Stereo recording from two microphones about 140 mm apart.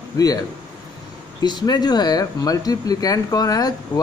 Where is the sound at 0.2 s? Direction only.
25° left (ahead or behind).